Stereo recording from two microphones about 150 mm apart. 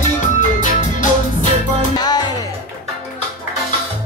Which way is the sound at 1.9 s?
25° left (ahead or behind).